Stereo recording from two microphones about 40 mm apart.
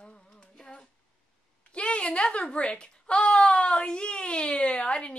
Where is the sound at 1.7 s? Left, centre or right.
Left.